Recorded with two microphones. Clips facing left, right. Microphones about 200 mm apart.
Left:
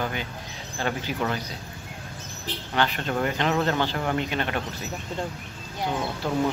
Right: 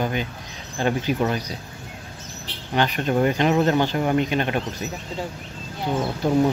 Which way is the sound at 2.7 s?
15° right (ahead or behind).